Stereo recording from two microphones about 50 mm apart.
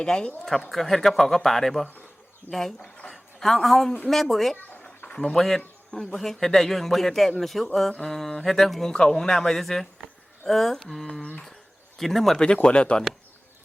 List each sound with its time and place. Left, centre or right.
0.0 s a man's voice: centre
0.7 s a man's voice: centre
3.1 s a sound: centre
4.1 s speech: centre
5.0 s a man's voice: centre
11.2 s speech: left
11.9 s speech: centre
12.6 s speech: left